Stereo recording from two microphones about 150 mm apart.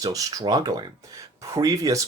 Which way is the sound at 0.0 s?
25° right (ahead or behind).